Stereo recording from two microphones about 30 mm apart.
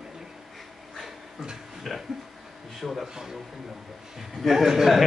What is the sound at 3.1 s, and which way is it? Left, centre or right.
Speech, centre.